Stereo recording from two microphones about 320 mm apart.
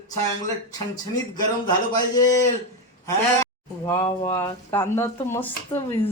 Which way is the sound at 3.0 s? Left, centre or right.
Centre.